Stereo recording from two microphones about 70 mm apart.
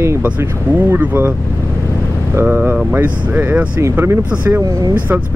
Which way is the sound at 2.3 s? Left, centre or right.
Right.